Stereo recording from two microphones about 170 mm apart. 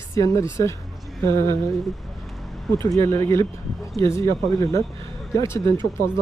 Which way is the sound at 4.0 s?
15° left (ahead or behind).